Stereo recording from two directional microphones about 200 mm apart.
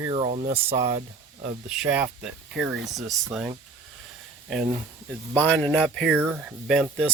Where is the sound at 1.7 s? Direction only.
5° right (ahead or behind).